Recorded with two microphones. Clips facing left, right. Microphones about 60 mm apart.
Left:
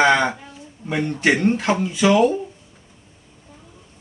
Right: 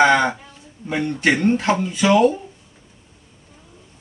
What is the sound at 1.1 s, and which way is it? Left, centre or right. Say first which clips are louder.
Speech: right 1 dB; centre.